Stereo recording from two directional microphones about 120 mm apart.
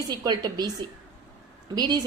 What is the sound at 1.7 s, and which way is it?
Speech, 35° right (ahead or behind).